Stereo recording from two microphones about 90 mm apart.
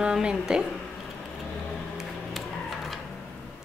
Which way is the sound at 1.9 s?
Centre (ahead or behind).